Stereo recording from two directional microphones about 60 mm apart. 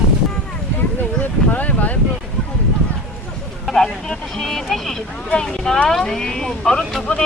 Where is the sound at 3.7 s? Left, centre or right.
Centre.